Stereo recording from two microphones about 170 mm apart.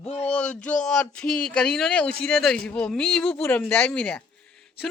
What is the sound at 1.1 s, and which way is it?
A man's voice, 5° left (ahead or behind).